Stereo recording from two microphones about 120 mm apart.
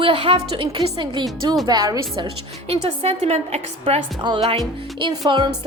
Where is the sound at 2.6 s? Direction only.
55° right (ahead or behind).